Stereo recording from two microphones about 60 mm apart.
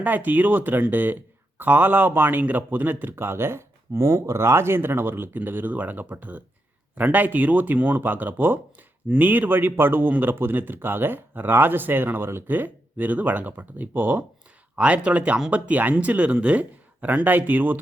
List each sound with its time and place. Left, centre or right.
0.0 s speech: right